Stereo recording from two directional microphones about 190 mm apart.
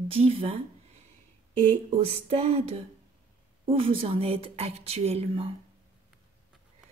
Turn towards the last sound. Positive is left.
turn(degrees=-35)  # may be behind; listen again after turning